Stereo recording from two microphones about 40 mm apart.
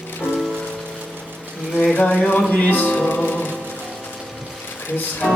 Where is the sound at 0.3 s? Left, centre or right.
Centre.